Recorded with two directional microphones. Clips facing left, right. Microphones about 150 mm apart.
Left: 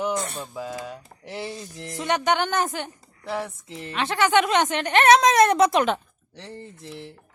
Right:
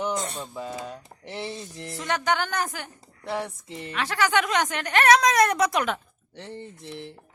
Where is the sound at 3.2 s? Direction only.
Centre (ahead or behind).